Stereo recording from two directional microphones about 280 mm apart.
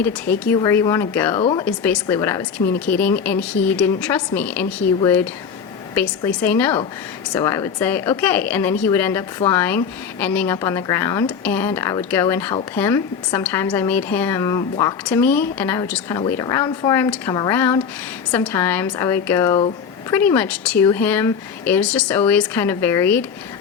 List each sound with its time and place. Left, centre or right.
0.5 s speech: centre
1.6 s a woman's voice: centre